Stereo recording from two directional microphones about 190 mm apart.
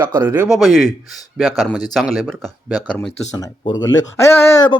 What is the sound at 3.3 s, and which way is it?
Speech, 20° left (ahead or behind).